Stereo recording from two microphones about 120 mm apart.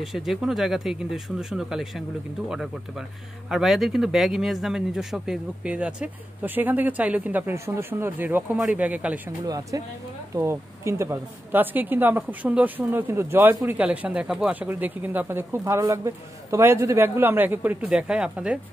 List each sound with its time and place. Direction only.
0.0 s speech: centre (ahead or behind)
9.5 s speech: 30° right (ahead or behind); by 18.6 s 10° right (ahead or behind)